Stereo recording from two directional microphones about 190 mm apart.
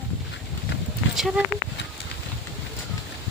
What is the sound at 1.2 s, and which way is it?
Speech, centre (ahead or behind).